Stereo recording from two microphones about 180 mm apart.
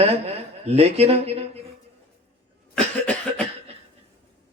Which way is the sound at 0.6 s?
35° right (ahead or behind).